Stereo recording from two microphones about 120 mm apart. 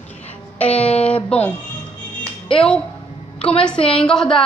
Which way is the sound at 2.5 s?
5° left (ahead or behind).